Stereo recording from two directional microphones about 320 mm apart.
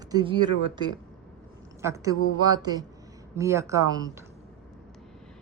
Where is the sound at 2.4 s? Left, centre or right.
Centre.